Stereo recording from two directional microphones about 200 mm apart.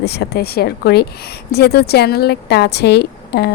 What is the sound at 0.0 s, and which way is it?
A woman's voice, 55° left (ahead or behind).